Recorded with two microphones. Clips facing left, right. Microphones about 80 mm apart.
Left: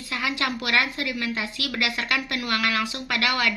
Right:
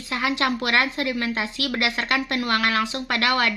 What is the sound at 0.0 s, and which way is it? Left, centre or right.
A woman's voice, right.